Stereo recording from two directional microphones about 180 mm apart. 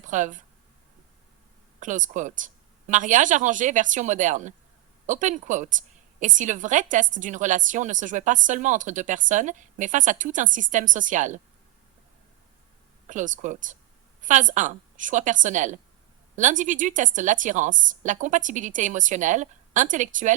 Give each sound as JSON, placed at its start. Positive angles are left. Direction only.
{"t": 0.0, "sound": "speech", "side_deg": -45}
{"t": 1.8, "sound": "a woman's voice", "side_deg": -45}
{"t": 13.1, "sound": "a woman's voice", "side_deg": -45}